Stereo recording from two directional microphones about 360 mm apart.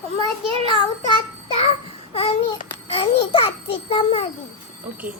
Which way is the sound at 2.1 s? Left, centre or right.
Centre.